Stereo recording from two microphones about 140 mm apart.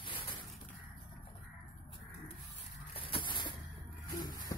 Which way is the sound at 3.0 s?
35° left (ahead or behind).